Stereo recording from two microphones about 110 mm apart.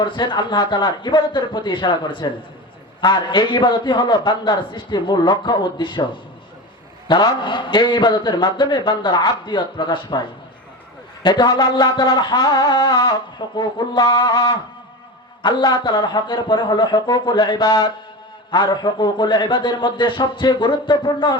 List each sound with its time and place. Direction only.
0.0 s a man's voice: 45° left (ahead or behind)
7.1 s a man's voice: 45° left (ahead or behind)
11.2 s a sound: 45° left (ahead or behind)
15.4 s a man's voice: 40° left (ahead or behind)